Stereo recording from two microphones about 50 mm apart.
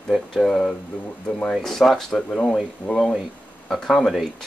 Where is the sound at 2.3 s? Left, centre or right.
Centre.